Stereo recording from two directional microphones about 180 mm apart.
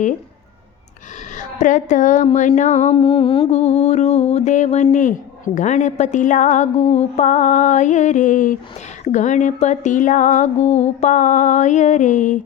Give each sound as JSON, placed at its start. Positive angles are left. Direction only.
{"t": 1.4, "sound": "music", "side_deg": 45}
{"t": 2.9, "sound": "music", "side_deg": 30}